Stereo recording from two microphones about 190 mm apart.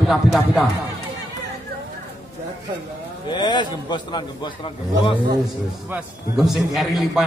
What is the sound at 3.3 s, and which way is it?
A man's voice, 25° left (ahead or behind).